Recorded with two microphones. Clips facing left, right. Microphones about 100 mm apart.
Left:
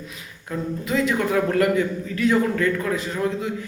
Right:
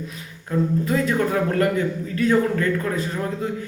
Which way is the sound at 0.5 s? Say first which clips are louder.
Right 3 dB; 35° right (ahead or behind).